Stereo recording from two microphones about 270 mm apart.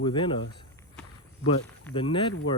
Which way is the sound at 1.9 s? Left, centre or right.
Centre.